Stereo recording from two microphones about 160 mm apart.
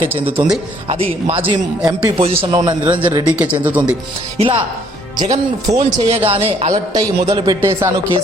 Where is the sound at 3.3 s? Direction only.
10° right (ahead or behind).